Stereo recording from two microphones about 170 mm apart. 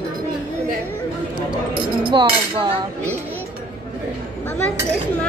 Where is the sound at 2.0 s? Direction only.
30° right (ahead or behind).